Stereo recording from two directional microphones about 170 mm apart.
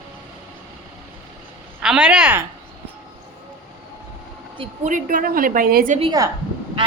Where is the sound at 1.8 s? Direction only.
5° right (ahead or behind).